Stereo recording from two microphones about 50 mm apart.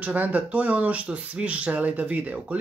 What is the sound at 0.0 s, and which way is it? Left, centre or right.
Speech, right.